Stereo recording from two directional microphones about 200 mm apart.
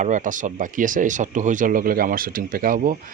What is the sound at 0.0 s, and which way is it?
Speech, 40° right (ahead or behind).